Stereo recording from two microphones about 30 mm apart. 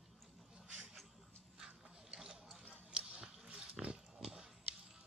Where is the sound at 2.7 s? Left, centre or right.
Right.